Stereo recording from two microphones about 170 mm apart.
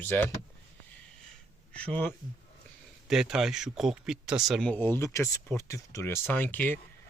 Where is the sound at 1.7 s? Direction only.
10° left (ahead or behind).